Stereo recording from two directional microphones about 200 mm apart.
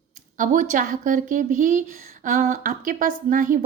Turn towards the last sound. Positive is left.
turn(degrees=-45)  # may be behind; listen again after turning